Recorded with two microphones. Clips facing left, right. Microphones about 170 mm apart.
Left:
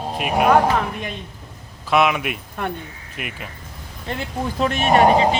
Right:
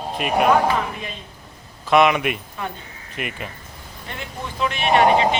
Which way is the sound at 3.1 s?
Centre (ahead or behind).